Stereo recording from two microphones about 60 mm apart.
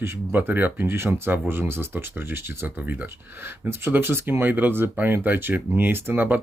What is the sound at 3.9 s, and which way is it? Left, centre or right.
Speech, right.